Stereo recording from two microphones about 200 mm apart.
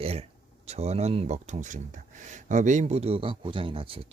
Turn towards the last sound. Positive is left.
turn(degrees=-25)  # may be behind; listen again after turning